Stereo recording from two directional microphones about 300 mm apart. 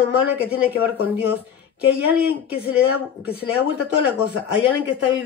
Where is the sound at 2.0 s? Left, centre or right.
Centre.